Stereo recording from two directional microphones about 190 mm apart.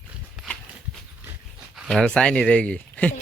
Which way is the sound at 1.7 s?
Centre (ahead or behind).